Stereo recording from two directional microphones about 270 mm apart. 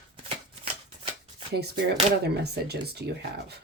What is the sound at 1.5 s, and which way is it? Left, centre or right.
Speech, right.